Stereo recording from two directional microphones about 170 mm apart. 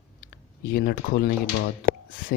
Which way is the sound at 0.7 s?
60° left (ahead or behind).